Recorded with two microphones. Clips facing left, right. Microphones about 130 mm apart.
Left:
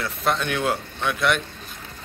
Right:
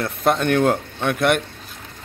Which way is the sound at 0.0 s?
50° right (ahead or behind).